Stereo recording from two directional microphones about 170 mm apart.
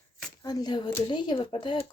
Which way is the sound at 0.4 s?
25° left (ahead or behind).